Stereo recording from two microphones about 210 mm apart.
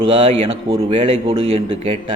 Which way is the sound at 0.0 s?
25° right (ahead or behind).